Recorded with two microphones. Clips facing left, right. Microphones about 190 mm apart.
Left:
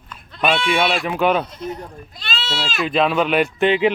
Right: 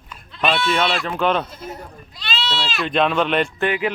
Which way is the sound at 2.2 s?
45° left (ahead or behind).